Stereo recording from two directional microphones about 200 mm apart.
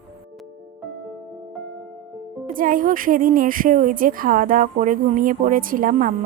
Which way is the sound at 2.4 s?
45° right (ahead or behind).